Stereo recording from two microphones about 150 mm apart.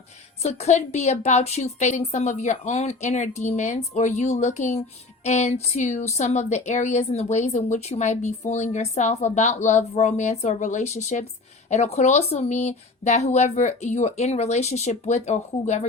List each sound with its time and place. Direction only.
0.4 s speech: 50° left (ahead or behind)